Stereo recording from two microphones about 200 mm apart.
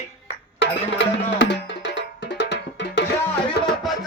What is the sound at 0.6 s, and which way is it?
Music, 65° left (ahead or behind).